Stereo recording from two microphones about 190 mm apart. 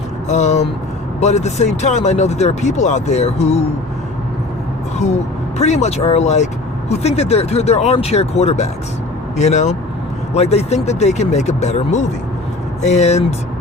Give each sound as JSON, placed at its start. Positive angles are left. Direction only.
{"t": 0.3, "sound": "speech", "side_deg": 40}
{"t": 5.5, "sound": "speech", "side_deg": 35}